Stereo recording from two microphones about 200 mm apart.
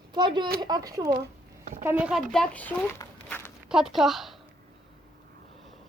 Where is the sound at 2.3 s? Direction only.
5° left (ahead or behind).